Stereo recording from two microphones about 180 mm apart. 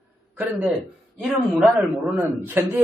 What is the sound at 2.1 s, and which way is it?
Speech, 10° right (ahead or behind).